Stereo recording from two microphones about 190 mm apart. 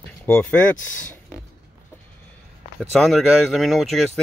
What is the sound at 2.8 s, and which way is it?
Speech, centre (ahead or behind).